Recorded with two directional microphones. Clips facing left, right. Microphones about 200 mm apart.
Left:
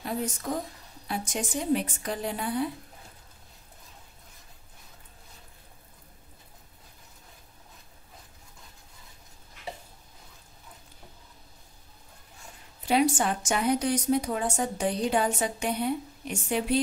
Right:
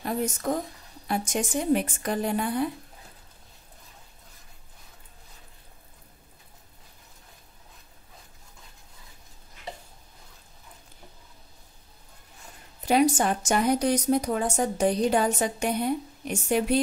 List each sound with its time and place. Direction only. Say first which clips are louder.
0.0 s a woman's voice: right 4 dB; 50° right (ahead or behind)
12.8 s a woman's voice: right 3 dB; 45° right (ahead or behind)